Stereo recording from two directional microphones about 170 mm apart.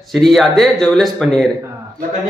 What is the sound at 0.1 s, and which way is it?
A man's voice, centre (ahead or behind).